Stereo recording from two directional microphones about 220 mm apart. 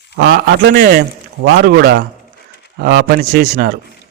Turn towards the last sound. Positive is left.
turn(degrees=-40)  # may be behind; listen again after turning